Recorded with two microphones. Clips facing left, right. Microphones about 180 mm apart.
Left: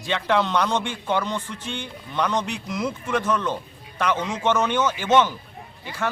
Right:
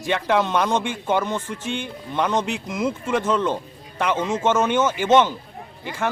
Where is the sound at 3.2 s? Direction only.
25° right (ahead or behind).